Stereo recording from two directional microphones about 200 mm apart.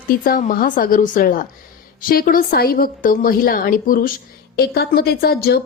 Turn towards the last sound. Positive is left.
turn(degrees=50)  # may be behind; listen again after turning